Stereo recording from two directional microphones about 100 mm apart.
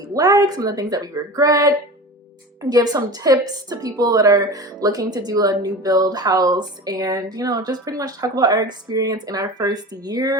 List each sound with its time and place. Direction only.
0.0 s a woman's voice: 40° right (ahead or behind)